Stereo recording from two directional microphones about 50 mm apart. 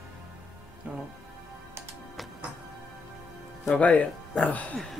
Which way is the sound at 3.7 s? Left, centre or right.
Left.